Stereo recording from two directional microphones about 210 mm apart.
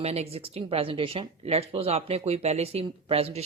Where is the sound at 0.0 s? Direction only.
30° right (ahead or behind).